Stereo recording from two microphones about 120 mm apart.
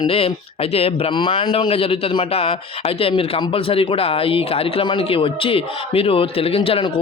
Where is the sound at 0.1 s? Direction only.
55° left (ahead or behind).